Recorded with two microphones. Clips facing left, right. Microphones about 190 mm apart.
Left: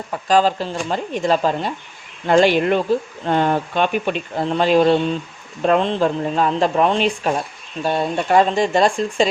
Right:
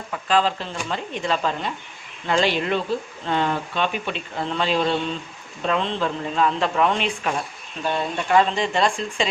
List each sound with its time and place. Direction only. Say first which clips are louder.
0.1 s speech: left 5 dB; 40° left (ahead or behind)
2.2 s speech: left 7 dB; 50° left (ahead or behind)